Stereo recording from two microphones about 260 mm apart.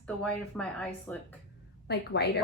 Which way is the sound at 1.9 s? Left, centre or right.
Left.